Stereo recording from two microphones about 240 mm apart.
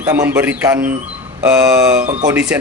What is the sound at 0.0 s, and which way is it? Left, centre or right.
Speech, centre.